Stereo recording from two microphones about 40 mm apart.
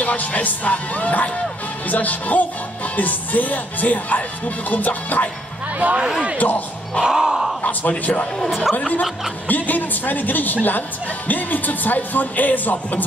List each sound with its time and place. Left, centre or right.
0.0 s music: left
5.8 s speech: right
6.3 s music: left
7.0 s crow: centre
8.0 s music: left
8.5 s speech: centre
9.5 s music: left